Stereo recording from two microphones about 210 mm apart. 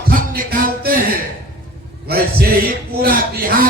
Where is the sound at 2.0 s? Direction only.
45° right (ahead or behind).